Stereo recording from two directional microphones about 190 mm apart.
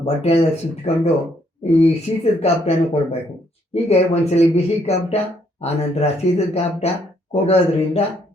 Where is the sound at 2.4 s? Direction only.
35° left (ahead or behind).